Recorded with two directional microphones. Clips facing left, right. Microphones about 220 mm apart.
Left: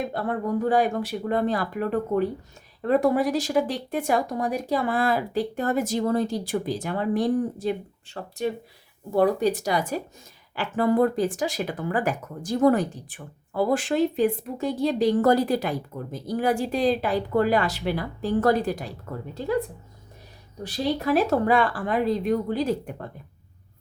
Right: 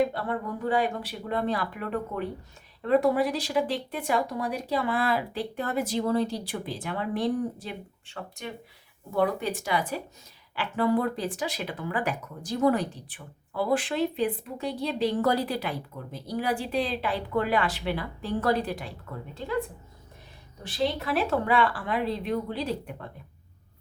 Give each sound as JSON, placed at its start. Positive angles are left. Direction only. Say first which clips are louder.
{"t": 0.1, "sound": "speech", "louder": "left 5 dB", "side_deg": 45}
{"t": 20.7, "sound": "speech", "louder": "left 4 dB", "side_deg": 40}